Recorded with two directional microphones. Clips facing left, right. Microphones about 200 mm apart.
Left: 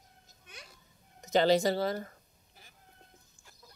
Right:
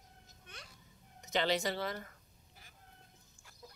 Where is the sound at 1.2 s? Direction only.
40° left (ahead or behind).